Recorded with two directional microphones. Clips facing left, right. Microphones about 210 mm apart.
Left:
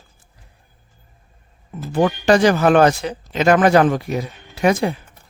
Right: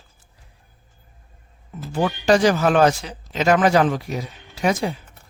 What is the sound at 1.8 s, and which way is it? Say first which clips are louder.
A man's voice: left 4 dB; 55° left (ahead or behind).